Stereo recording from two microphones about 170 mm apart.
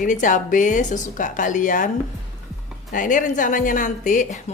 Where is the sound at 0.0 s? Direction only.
50° left (ahead or behind).